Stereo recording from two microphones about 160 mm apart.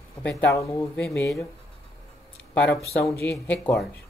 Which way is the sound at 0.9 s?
10° left (ahead or behind).